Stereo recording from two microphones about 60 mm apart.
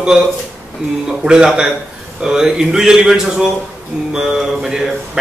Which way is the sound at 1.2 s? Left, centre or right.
Centre.